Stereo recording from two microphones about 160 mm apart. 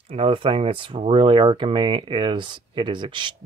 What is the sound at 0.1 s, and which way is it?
Speech, 35° right (ahead or behind).